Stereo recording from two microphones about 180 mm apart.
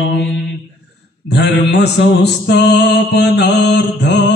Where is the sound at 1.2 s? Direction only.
70° left (ahead or behind).